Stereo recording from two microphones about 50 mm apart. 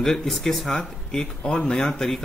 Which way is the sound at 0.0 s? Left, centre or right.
Centre.